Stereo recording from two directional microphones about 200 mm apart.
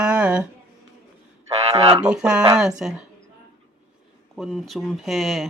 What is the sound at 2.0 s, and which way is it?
Speech, 5° right (ahead or behind).